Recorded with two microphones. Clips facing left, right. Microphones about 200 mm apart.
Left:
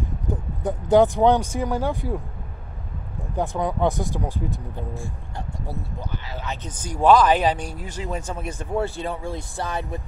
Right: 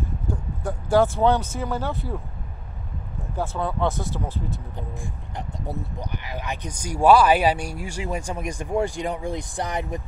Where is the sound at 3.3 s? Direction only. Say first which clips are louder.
Left 2 dB; 15° left (ahead or behind).